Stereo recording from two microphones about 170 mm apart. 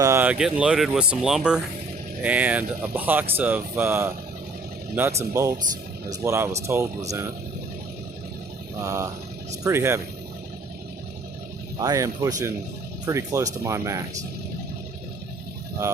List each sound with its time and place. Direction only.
0.0 s speech: 15° right (ahead or behind)
5.3 s speech: 20° right (ahead or behind)
8.8 s speech: 20° right (ahead or behind)
11.8 s speech: 20° right (ahead or behind)